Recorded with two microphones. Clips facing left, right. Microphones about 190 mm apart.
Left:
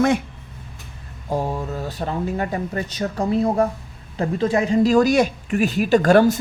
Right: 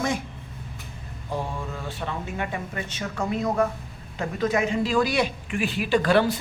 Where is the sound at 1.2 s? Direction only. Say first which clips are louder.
Left 7 dB; 45° left (ahead or behind).